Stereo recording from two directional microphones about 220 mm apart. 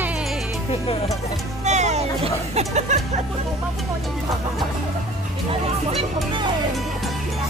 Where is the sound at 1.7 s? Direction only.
30° right (ahead or behind).